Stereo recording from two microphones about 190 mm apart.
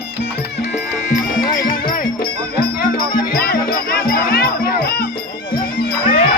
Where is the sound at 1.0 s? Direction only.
45° left (ahead or behind).